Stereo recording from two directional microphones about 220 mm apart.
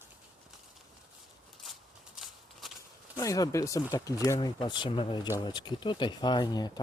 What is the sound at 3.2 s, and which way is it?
Speech, 15° left (ahead or behind).